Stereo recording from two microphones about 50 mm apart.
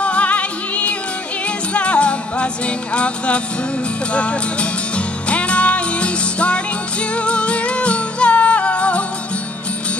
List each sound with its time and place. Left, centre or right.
0.0 s music: left